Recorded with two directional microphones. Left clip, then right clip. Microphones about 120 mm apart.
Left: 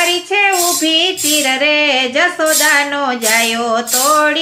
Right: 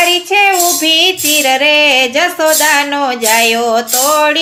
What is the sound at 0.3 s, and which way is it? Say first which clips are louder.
Child singing: right 3 dB; 40° right (ahead or behind).